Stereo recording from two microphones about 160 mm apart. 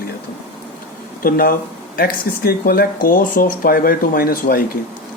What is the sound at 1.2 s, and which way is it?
Speech, 65° left (ahead or behind).